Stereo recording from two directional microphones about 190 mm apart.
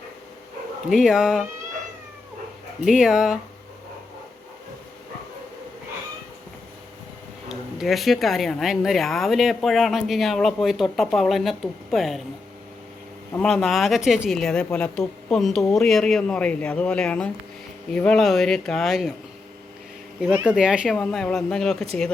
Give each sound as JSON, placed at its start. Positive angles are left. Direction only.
{"t": 0.9, "sound": "speech", "side_deg": 0}
{"t": 2.8, "sound": "speech", "side_deg": 0}
{"t": 7.4, "sound": "speech", "side_deg": 0}
{"t": 13.3, "sound": "speech", "side_deg": 5}
{"t": 20.5, "sound": "speech", "side_deg": -5}